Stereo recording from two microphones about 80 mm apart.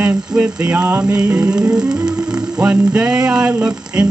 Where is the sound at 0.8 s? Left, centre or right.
Right.